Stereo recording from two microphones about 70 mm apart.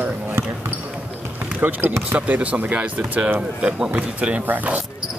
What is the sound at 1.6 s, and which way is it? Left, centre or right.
Speech, right.